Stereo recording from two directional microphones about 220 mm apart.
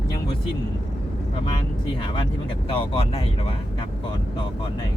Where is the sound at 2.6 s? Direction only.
25° left (ahead or behind).